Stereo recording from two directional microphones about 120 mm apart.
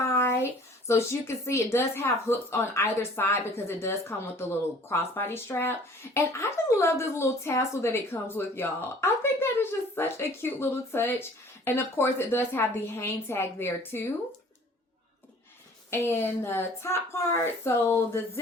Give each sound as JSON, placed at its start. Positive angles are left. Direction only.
{"t": 0.0, "sound": "a sound", "side_deg": 20}
{"t": 0.9, "sound": "speech", "side_deg": 20}
{"t": 15.9, "sound": "speech", "side_deg": 20}